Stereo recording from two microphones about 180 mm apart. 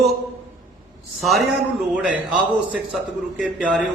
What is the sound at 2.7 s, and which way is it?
A man's voice, 5° right (ahead or behind).